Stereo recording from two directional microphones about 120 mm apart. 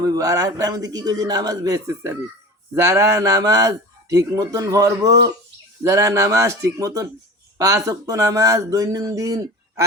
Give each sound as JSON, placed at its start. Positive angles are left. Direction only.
{"t": 0.0, "sound": "a man's voice", "side_deg": -30}